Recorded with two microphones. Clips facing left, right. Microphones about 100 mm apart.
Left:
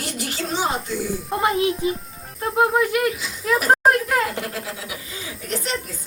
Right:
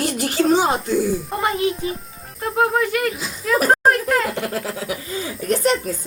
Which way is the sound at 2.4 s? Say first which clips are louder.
Even; 5° left (ahead or behind).